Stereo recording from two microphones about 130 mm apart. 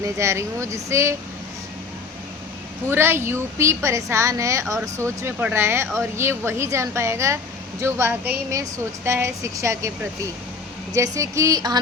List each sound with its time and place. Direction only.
0.0 s speech: 25° right (ahead or behind)
2.9 s speech: 20° right (ahead or behind)
10.9 s speech: 25° right (ahead or behind)